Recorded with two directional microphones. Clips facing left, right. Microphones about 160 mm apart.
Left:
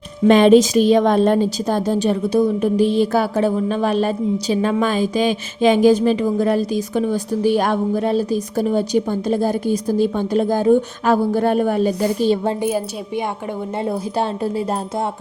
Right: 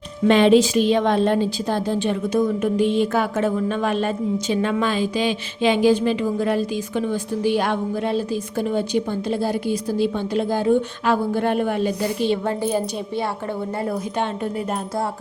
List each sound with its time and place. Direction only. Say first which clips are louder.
0.3 s a woman's voice: left 4 dB; 45° left (ahead or behind)
12.6 s speech: left 1 dB; 10° left (ahead or behind)